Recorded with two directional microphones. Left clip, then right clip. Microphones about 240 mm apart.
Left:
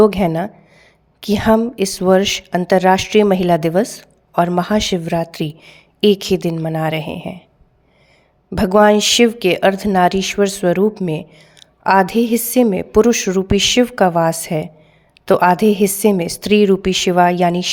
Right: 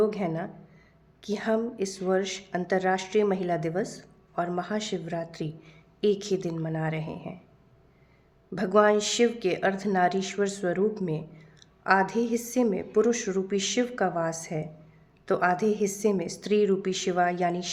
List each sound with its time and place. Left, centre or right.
0.0 s a woman's voice: left
8.5 s a woman's voice: left